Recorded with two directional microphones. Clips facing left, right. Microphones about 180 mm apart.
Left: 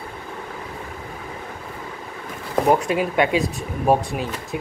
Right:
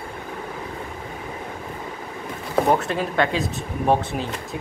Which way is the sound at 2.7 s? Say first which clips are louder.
Left 2 dB; 10° left (ahead or behind).